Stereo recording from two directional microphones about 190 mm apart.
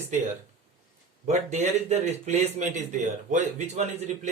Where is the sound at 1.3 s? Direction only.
35° right (ahead or behind).